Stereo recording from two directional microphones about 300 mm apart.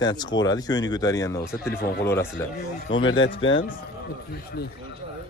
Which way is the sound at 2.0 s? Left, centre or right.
Centre.